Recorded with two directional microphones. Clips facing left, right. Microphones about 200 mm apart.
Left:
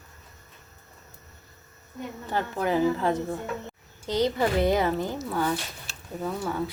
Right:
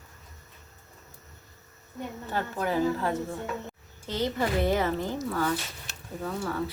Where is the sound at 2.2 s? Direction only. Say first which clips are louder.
Left 3 dB; 15° left (ahead or behind).